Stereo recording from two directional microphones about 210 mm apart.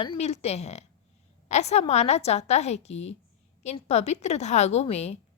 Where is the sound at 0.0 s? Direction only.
30° left (ahead or behind).